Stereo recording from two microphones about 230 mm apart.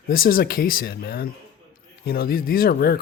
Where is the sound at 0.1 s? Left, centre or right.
Left.